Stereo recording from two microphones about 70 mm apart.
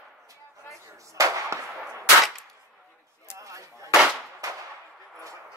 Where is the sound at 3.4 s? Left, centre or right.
Right.